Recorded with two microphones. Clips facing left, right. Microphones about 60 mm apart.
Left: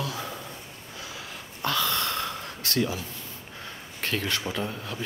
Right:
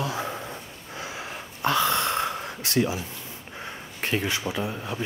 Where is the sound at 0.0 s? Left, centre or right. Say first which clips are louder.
Right 4 dB; right.